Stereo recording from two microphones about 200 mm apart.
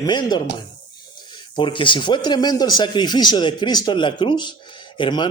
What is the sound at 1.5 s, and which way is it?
Speech, 25° left (ahead or behind).